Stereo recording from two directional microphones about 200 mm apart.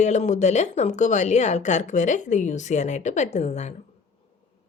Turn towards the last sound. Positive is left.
turn(degrees=35)  # may be behind; listen again after turning